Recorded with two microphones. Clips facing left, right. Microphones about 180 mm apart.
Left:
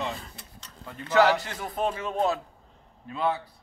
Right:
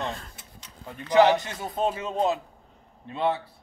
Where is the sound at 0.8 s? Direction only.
20° right (ahead or behind).